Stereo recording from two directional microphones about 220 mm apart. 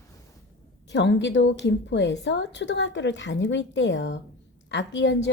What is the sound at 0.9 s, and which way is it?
A woman's voice, 55° left (ahead or behind).